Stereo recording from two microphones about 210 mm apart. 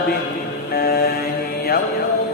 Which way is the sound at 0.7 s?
50° left (ahead or behind).